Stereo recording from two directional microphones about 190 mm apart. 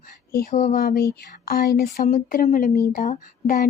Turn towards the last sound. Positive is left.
turn(degrees=45)  # may be behind; listen again after turning